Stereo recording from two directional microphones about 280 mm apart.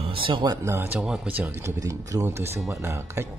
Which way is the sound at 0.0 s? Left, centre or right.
Centre.